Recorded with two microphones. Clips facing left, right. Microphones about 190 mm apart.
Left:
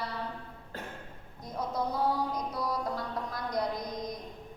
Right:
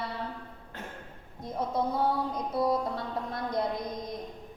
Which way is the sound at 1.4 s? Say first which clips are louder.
Right 3 dB; 25° right (ahead or behind).